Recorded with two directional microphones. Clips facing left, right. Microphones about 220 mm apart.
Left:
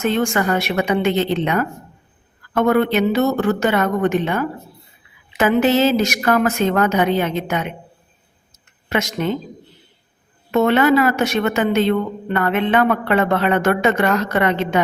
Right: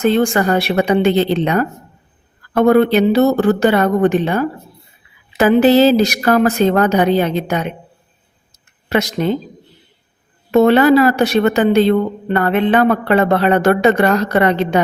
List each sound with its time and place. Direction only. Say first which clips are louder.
0.0 s a woman's voice: right 5 dB; 35° right (ahead or behind)
8.9 s a woman's voice: right 4 dB; 35° right (ahead or behind)
10.5 s a woman's voice: right 5 dB; 35° right (ahead or behind)